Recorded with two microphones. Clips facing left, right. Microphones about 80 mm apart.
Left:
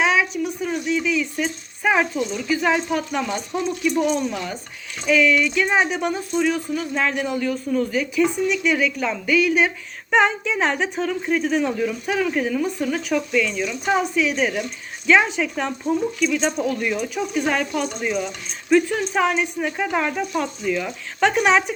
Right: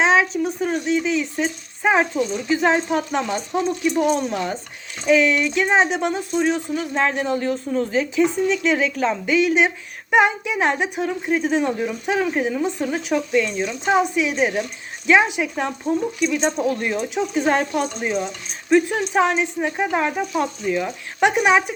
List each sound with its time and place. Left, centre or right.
0.0 s speech: right
3.6 s speech: right
13.3 s speech: right
13.9 s speech: right